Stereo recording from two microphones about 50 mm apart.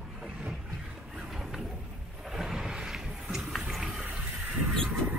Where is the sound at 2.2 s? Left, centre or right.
Centre.